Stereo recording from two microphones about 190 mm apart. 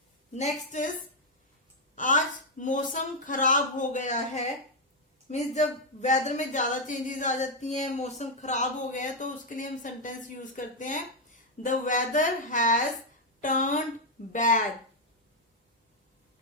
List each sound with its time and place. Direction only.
0.3 s speech: 40° left (ahead or behind)
2.0 s speech: 40° left (ahead or behind)